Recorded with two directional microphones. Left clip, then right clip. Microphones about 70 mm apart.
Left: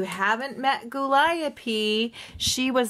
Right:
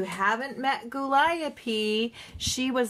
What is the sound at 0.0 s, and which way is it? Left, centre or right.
Speech, left.